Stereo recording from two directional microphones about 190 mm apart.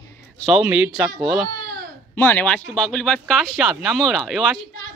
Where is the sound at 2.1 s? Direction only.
10° left (ahead or behind).